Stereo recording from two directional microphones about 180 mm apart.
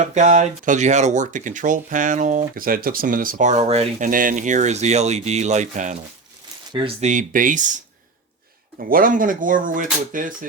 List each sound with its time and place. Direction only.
0.0 s speech: 40° right (ahead or behind)
4.1 s speech: 50° right (ahead or behind)
8.8 s speech: 50° right (ahead or behind)